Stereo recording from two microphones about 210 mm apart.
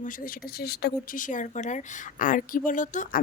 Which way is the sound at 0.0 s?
45° left (ahead or behind).